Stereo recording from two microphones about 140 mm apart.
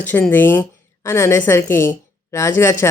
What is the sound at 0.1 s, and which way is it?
A woman's voice, 15° left (ahead or behind).